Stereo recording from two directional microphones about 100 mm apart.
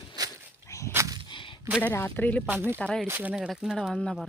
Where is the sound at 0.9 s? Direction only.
35° right (ahead or behind).